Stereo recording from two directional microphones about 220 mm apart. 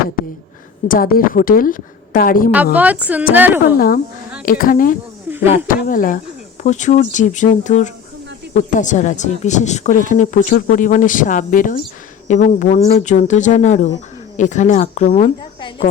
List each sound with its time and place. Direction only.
0.9 s speech: 40° left (ahead or behind)
2.7 s a woman's voice: 5° right (ahead or behind)
3.8 s speech: 40° left (ahead or behind)